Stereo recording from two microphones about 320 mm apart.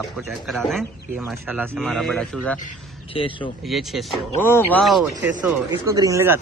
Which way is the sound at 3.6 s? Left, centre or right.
Centre.